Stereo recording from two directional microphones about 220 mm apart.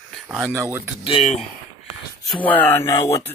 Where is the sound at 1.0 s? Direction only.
25° left (ahead or behind).